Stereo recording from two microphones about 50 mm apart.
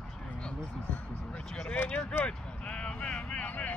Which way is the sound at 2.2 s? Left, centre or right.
Left.